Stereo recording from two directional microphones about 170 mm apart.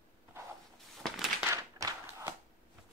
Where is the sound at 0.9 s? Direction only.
Centre (ahead or behind).